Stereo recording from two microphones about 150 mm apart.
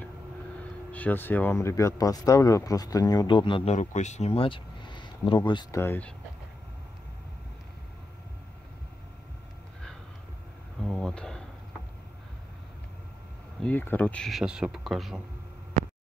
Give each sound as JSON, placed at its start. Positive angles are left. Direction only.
{"t": 0.9, "sound": "speech", "side_deg": 10}
{"t": 3.7, "sound": "speech", "side_deg": 50}
{"t": 5.8, "sound": "speech", "side_deg": 10}
{"t": 10.8, "sound": "a sound", "side_deg": 0}
{"t": 13.6, "sound": "speech", "side_deg": 10}
{"t": 15.8, "sound": "a sound", "side_deg": -50}